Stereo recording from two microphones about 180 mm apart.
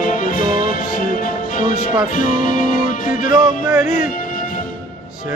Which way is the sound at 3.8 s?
45° left (ahead or behind).